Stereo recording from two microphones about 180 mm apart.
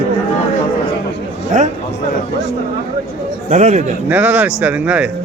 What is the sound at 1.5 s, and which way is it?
Speech, 45° right (ahead or behind).